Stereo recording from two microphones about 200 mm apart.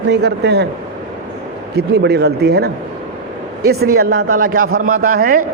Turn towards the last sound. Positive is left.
turn(degrees=-45)  # may be behind; listen again after turning